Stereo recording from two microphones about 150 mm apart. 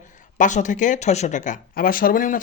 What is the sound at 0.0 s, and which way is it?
Speech, 55° left (ahead or behind).